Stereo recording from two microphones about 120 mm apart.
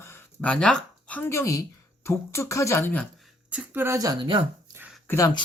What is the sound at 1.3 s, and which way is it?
Speech, 25° left (ahead or behind).